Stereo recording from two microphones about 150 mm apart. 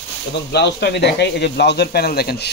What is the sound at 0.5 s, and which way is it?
Speech, 90° left.